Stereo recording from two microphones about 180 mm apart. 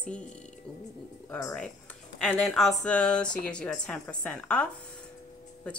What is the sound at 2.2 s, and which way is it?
A woman's voice, 5° left (ahead or behind).